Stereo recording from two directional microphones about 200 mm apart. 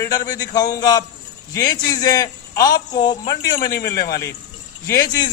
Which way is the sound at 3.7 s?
50° left (ahead or behind).